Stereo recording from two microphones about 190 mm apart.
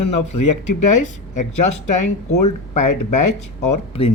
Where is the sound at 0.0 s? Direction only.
35° left (ahead or behind).